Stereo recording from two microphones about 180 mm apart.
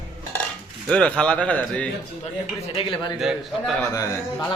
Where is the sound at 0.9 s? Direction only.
5° left (ahead or behind).